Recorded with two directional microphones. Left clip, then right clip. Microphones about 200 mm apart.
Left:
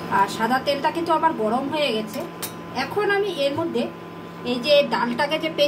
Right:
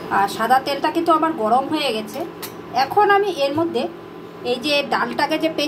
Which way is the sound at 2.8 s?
35° right (ahead or behind).